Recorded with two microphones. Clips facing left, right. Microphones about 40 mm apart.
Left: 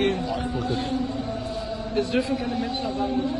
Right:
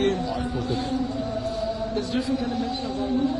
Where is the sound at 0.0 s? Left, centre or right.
Left.